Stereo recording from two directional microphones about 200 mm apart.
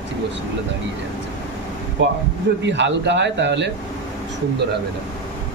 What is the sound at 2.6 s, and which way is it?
Speech, 65° right (ahead or behind).